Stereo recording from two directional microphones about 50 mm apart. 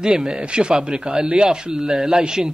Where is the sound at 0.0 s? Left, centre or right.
Centre.